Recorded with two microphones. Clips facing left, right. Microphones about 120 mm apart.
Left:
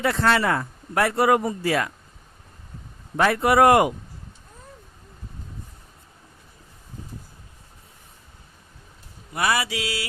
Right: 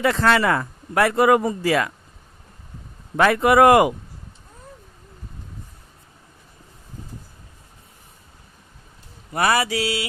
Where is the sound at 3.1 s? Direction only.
90° right.